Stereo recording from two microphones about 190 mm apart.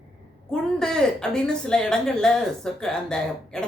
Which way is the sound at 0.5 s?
5° left (ahead or behind).